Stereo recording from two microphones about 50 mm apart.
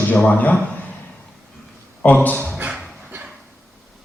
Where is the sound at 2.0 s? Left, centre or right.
Left.